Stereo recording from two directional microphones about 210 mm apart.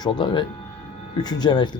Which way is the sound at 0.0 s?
20° left (ahead or behind).